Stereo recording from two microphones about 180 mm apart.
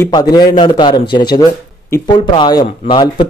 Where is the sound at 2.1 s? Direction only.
25° left (ahead or behind).